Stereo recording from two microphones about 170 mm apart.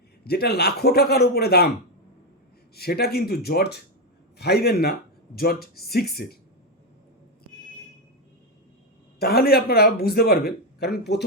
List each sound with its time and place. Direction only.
0.3 s speech: 70° left (ahead or behind)
2.7 s a man's voice: 65° left (ahead or behind)
9.1 s a man's voice: 65° left (ahead or behind)